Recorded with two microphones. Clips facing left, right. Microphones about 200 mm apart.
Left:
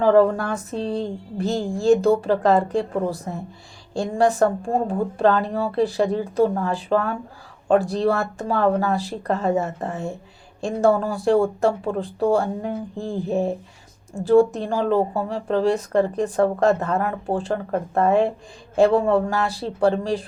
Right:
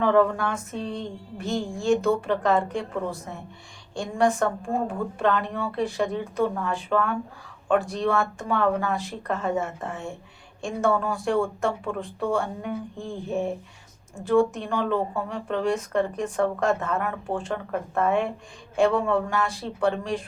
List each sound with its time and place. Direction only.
0.0 s speech: 35° left (ahead or behind)